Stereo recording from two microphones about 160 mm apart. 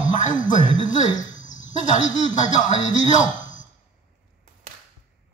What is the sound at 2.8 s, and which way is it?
Speech, 50° left (ahead or behind).